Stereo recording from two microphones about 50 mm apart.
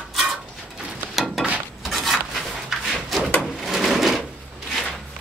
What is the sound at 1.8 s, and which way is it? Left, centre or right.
Drawer open or close, centre.